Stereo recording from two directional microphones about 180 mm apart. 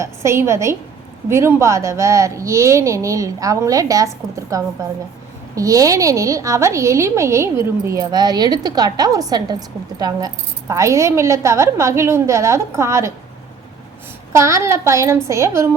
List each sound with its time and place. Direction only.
0.0 s a woman's voice: 15° right (ahead or behind)
14.3 s a woman's voice: 15° right (ahead or behind)